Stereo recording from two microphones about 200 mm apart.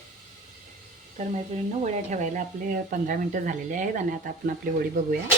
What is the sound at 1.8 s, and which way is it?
Speech, 35° right (ahead or behind).